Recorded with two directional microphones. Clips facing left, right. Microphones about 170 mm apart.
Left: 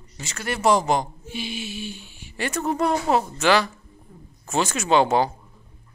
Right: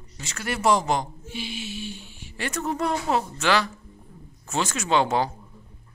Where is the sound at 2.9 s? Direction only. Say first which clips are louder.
Left 3 dB; 45° left (ahead or behind).